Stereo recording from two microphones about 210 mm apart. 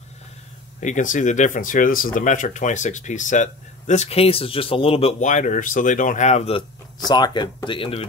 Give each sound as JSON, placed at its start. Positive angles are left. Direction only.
{"t": 0.7, "sound": "speech", "side_deg": 35}
{"t": 7.1, "sound": "speech", "side_deg": 20}